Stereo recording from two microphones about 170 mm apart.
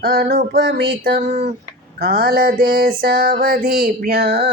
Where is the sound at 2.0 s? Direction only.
65° right (ahead or behind).